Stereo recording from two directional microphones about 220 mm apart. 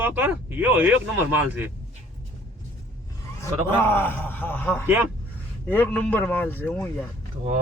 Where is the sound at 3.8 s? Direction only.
10° left (ahead or behind).